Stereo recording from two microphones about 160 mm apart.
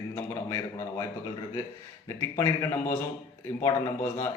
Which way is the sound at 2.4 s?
15° left (ahead or behind).